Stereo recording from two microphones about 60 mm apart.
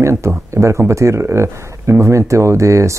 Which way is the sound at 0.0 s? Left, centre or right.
Right.